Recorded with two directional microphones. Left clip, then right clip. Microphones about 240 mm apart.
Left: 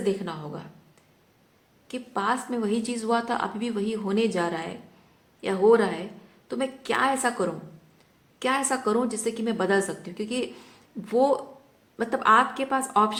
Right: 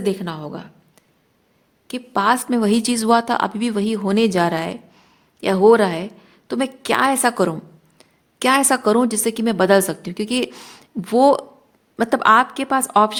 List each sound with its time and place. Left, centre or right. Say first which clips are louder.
0.0 s a woman's voice: right 5 dB; right
1.9 s a woman's voice: right 9 dB; right